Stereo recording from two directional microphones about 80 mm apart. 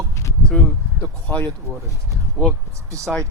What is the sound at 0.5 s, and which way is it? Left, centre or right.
Speech, left.